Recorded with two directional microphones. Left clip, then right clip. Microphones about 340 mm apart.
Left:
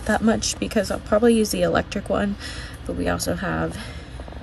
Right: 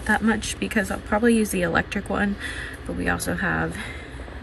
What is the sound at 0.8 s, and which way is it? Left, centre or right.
Speech, centre.